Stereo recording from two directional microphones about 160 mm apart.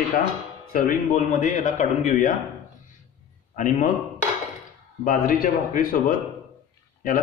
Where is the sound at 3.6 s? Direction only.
50° left (ahead or behind).